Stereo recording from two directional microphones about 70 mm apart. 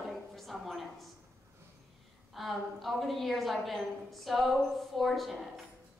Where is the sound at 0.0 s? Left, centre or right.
Centre.